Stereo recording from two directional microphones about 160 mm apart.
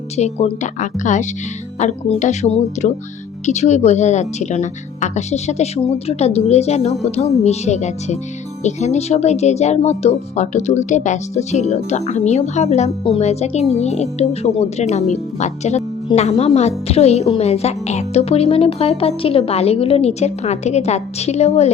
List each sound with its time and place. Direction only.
0.2 s a woman's voice: 45° left (ahead or behind)